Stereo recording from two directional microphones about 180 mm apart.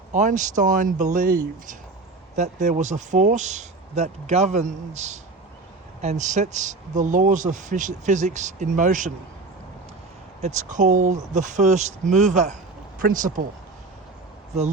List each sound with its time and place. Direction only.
0.1 s speech: 45° right (ahead or behind)
10.4 s speech: 40° right (ahead or behind)